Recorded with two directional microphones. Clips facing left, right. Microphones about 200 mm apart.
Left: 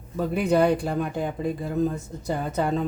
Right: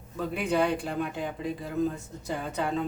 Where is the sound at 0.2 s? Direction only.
40° left (ahead or behind).